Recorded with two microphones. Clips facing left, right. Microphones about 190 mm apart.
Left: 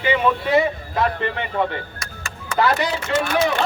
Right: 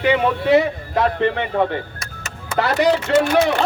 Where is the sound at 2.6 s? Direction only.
60° right (ahead or behind).